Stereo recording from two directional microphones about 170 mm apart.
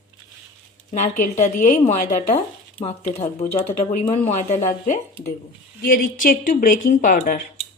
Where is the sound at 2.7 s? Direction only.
35° left (ahead or behind).